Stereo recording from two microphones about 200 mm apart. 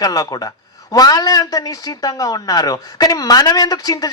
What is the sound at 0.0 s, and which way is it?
Speech, 20° left (ahead or behind).